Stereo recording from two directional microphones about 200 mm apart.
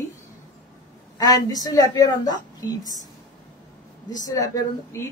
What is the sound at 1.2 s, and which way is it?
A woman's voice, 20° left (ahead or behind).